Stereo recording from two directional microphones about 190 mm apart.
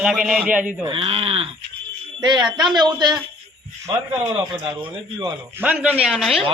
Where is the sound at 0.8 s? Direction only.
30° right (ahead or behind).